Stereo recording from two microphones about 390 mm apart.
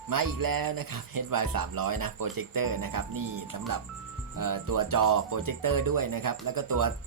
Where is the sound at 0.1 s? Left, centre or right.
Right.